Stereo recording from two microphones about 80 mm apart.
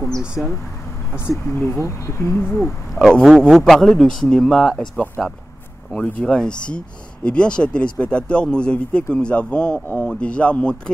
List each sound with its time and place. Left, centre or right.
1.5 s speech: left
2.5 s a man's voice: centre